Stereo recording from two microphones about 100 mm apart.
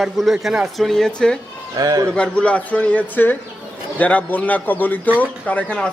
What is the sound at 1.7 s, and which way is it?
Speech, 40° right (ahead or behind).